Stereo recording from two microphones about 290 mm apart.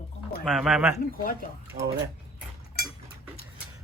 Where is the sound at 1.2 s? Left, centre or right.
Left.